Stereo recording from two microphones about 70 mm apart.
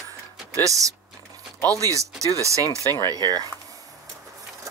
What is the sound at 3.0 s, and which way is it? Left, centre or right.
Speech, right.